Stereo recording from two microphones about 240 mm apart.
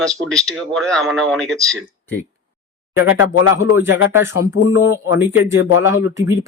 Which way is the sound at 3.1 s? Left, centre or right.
Left.